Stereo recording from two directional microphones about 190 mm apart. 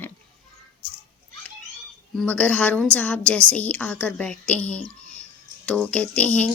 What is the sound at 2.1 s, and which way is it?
A woman's voice, 5° left (ahead or behind).